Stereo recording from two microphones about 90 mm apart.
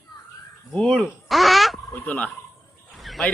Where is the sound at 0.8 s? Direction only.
5° left (ahead or behind).